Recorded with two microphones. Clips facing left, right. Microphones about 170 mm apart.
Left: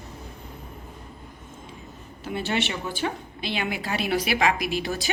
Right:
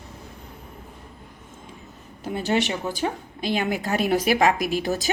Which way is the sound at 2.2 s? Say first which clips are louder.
Right 4 dB; 45° right (ahead or behind).